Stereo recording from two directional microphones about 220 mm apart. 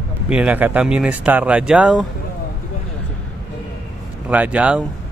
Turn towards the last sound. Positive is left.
turn(degrees=-5)  # may be behind; listen again after turning